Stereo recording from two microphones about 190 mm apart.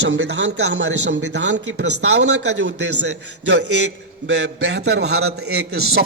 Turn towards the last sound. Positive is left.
turn(degrees=-55)  # may be behind; listen again after turning